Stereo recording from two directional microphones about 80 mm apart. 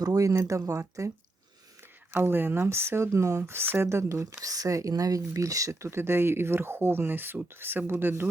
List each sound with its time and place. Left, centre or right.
0.0 s speech: right
2.1 s speech: right